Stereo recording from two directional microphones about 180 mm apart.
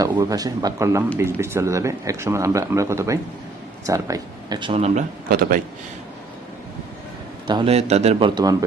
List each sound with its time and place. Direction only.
0.0 s speech: 15° right (ahead or behind)
4.7 s a man's voice: 35° right (ahead or behind)
5.3 s a man's voice: 50° right (ahead or behind)
7.4 s a man's voice: 25° right (ahead or behind)
7.7 s a man's voice: 35° right (ahead or behind)